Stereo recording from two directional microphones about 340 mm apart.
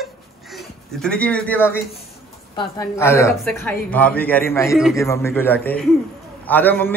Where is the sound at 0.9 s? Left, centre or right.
Centre.